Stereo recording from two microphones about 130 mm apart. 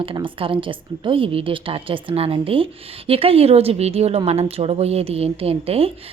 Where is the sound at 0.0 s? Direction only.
45° right (ahead or behind).